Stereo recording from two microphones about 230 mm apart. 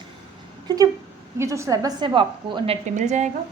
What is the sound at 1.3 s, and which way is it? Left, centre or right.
A woman's voice, centre.